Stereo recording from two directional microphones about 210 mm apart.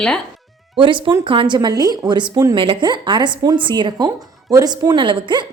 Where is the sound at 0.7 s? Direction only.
25° right (ahead or behind).